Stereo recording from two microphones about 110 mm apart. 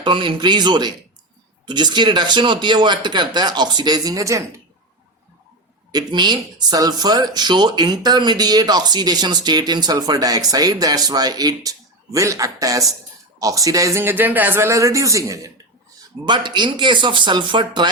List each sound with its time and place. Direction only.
0.0 s speech: 50° right (ahead or behind); by 4.6 s 30° right (ahead or behind)
5.9 s speech: 40° right (ahead or behind)
16.2 s speech: 45° right (ahead or behind)